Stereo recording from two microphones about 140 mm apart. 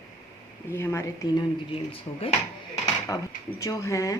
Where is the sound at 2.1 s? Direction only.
40° left (ahead or behind).